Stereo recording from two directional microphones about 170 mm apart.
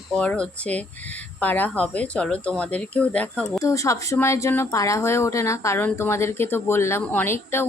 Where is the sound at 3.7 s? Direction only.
20° left (ahead or behind).